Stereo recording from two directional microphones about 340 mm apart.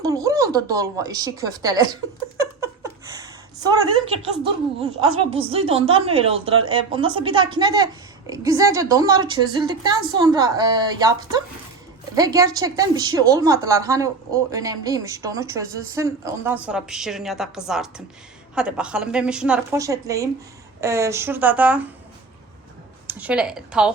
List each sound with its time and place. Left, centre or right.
0.0 s speech: centre
2.4 s a sound: centre
5.1 s a woman's voice: centre
23.0 s speech: centre